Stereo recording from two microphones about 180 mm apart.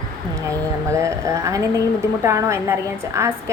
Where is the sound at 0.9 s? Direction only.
15° right (ahead or behind).